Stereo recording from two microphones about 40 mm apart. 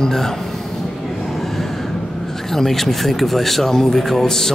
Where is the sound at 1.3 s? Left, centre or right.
Centre.